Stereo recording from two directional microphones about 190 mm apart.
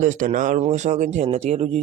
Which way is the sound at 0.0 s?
40° right (ahead or behind).